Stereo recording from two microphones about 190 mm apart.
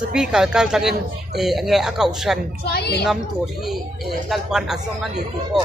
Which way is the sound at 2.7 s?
55° left (ahead or behind).